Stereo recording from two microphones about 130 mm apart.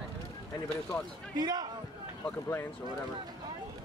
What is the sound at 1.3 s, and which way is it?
Speech, 30° right (ahead or behind).